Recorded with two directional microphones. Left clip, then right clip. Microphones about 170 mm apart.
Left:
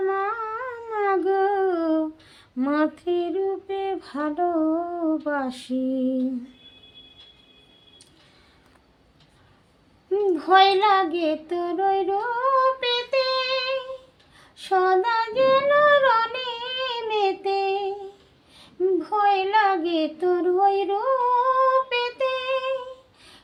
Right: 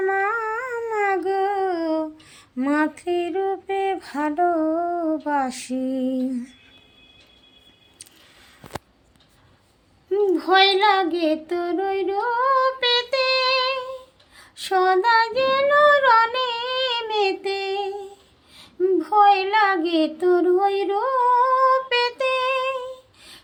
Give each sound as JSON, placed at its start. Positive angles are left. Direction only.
{"t": 0.0, "sound": "a sound", "side_deg": -5}
{"t": 2.7, "sound": "female singing", "side_deg": -5}
{"t": 10.1, "sound": "female singing", "side_deg": -35}
{"t": 18.5, "sound": "child singing", "side_deg": -35}